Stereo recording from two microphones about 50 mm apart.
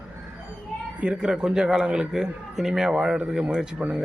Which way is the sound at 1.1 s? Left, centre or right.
Centre.